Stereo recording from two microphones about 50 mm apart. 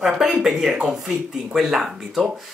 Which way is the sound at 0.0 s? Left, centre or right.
Centre.